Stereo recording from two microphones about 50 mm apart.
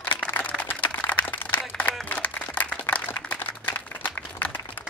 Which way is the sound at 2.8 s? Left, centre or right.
Left.